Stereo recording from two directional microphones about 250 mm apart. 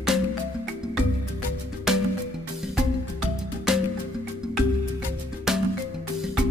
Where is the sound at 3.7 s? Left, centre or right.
Centre.